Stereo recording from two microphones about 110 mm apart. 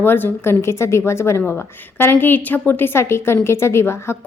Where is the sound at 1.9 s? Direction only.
20° left (ahead or behind).